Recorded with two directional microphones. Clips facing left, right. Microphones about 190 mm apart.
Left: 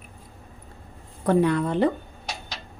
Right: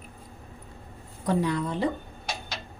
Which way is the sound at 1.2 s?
60° left (ahead or behind).